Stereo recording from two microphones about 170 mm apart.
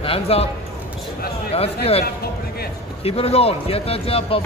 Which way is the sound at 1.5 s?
35° left (ahead or behind).